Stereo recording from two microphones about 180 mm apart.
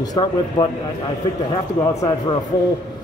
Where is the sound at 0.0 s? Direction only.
20° left (ahead or behind).